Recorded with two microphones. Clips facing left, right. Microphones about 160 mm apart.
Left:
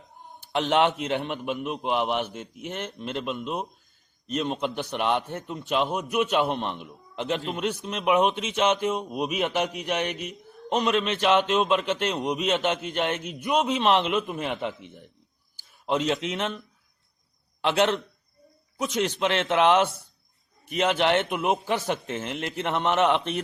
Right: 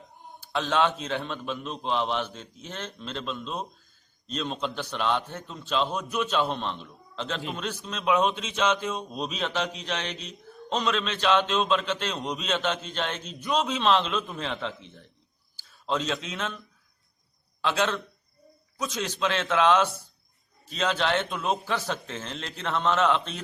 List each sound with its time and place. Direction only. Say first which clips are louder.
0.3 s a man's voice: left 3 dB; 20° left (ahead or behind)